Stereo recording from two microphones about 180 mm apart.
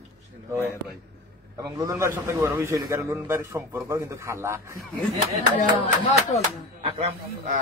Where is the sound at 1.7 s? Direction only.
15° right (ahead or behind).